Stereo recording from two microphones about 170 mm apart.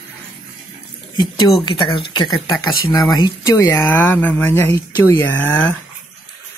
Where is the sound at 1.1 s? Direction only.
25° left (ahead or behind); by 5.8 s 10° left (ahead or behind).